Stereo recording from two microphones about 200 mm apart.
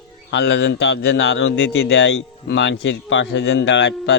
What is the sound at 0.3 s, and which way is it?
A man's voice, 60° left (ahead or behind).